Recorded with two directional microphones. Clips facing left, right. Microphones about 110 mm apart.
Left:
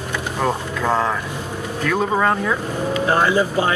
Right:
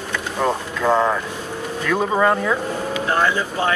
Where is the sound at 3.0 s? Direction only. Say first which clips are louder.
Left 3 dB; 20° left (ahead or behind).